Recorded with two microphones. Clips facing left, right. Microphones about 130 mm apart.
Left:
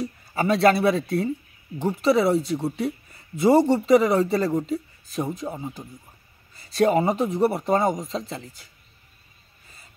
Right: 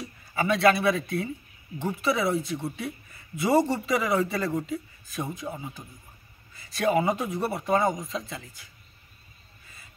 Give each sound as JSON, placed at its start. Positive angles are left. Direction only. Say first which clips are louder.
{"t": 0.0, "sound": "speech", "louder": "left 4 dB", "side_deg": 35}